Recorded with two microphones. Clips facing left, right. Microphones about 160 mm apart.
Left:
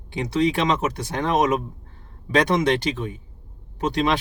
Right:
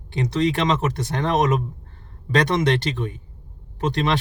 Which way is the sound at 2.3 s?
15° left (ahead or behind).